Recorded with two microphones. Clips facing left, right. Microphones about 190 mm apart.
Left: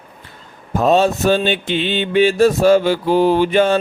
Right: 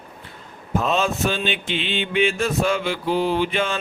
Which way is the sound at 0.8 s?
40° left (ahead or behind).